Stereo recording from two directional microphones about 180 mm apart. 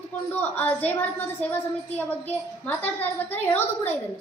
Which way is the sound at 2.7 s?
10° left (ahead or behind).